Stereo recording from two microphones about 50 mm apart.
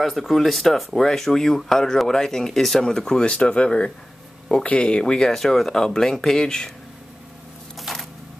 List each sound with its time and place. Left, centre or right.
0.0 s speech: centre
5.3 s speech: centre
7.9 s a sound: centre